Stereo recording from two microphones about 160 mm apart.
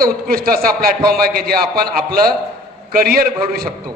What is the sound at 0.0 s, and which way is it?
A man's voice, 70° right (ahead or behind).